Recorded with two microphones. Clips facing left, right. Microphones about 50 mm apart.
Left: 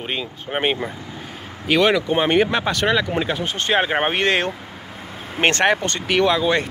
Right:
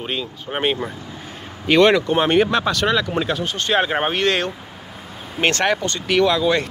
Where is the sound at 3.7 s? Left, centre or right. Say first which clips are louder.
Even; centre; by 6.0 s left.